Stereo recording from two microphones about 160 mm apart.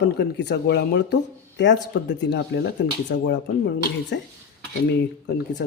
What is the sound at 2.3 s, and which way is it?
Speech, 90° left.